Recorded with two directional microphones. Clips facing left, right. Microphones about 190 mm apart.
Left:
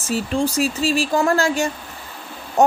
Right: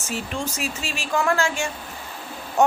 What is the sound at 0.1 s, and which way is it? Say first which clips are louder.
A woman's voice: left 8 dB; 35° left (ahead or behind).